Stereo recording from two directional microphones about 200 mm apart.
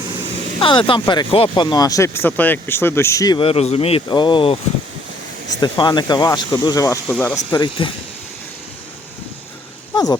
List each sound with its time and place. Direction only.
0.6 s speech: 25° left (ahead or behind)
5.5 s speech: 20° left (ahead or behind)
7.1 s speech: 5° left (ahead or behind)
7.5 s speech: 25° left (ahead or behind)
9.9 s a sound: 20° left (ahead or behind)